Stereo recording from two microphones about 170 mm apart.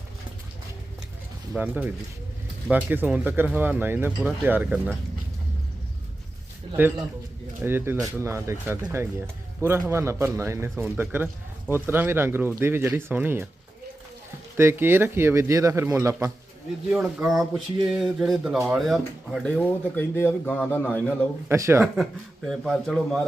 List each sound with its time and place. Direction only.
1.5 s speech: 10° right (ahead or behind)
7.6 s speech: 15° right (ahead or behind)
14.5 s speech: 15° right (ahead or behind)
16.9 s speech: 5° right (ahead or behind)
21.5 s speech: 15° right (ahead or behind)
22.4 s speech: centre (ahead or behind)